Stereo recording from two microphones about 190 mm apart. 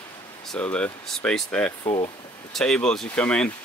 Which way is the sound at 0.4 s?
5° left (ahead or behind).